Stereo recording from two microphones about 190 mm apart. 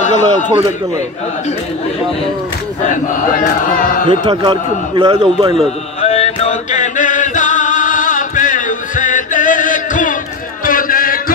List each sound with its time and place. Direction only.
0.0 s a man's voice: 40° left (ahead or behind)
2.9 s chant: 45° left (ahead or behind)
4.1 s a man's voice: 25° right (ahead or behind)
5.9 s music: 35° left (ahead or behind)
10.6 s a sound: 50° left (ahead or behind)